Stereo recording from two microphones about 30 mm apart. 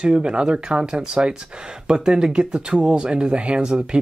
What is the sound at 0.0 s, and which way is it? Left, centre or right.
Speech, right.